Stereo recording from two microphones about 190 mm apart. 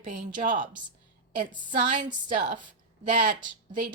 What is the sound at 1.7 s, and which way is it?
Speech, 45° right (ahead or behind).